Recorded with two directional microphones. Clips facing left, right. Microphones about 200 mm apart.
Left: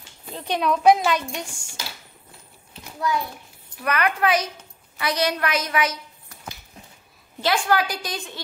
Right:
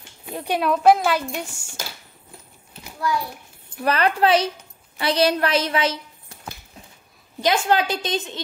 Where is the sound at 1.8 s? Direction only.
50° right (ahead or behind).